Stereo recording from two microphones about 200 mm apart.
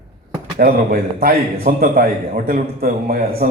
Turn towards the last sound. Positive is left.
turn(degrees=-50)  # may be behind; listen again after turning